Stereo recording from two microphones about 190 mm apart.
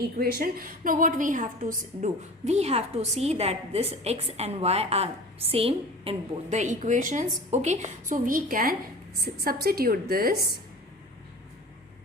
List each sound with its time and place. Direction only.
0.0 s a woman's voice: 55° right (ahead or behind)